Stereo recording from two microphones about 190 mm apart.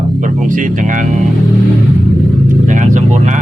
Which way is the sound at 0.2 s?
40° right (ahead or behind).